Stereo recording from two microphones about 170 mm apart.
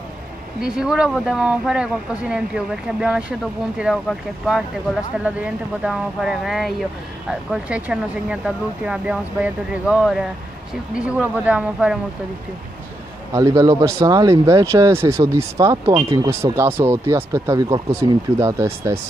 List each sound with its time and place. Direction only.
0.6 s speech: 5° right (ahead or behind)
13.3 s speech: 20° right (ahead or behind)